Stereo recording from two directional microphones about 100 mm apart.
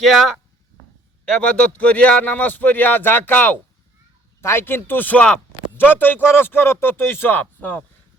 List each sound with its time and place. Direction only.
0.0 s speech: centre (ahead or behind)
1.2 s a man's voice: 10° left (ahead or behind)